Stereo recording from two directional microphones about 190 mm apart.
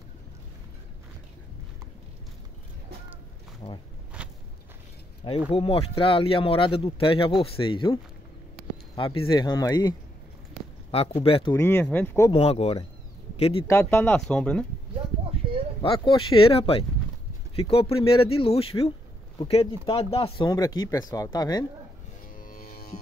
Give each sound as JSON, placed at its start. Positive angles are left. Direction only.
{"t": 3.6, "sound": "speech", "side_deg": 30}
{"t": 4.1, "sound": "walk", "side_deg": -5}
{"t": 5.5, "sound": "speech", "side_deg": 30}
{"t": 10.9, "sound": "speech", "side_deg": 30}
{"t": 11.5, "sound": "speech", "side_deg": 10}
{"t": 12.3, "sound": "speech", "side_deg": 30}
{"t": 13.7, "sound": "speech", "side_deg": 15}
{"t": 15.8, "sound": "speech", "side_deg": 30}
{"t": 20.4, "sound": "speech", "side_deg": 20}
{"t": 22.5, "sound": "music", "side_deg": 50}